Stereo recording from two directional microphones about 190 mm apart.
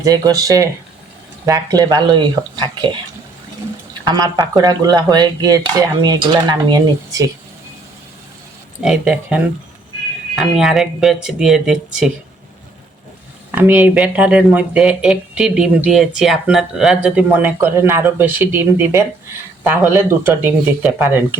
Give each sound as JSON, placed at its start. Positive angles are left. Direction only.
{"t": 0.0, "sound": "speech", "side_deg": -20}
{"t": 4.0, "sound": "speech", "side_deg": -20}
{"t": 8.8, "sound": "speech", "side_deg": -5}
{"t": 13.5, "sound": "speech", "side_deg": -10}